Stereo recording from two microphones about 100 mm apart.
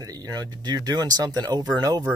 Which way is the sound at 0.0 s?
40° right (ahead or behind).